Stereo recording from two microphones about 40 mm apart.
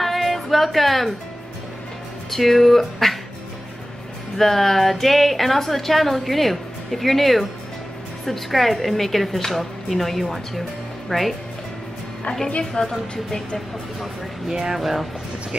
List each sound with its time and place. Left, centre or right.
0.0 s music: centre
2.3 s speech: centre
4.4 s speech: centre
12.8 s a woman's voice: left
14.5 s speech: centre